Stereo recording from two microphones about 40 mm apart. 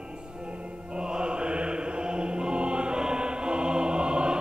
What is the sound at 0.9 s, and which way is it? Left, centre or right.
Music, right.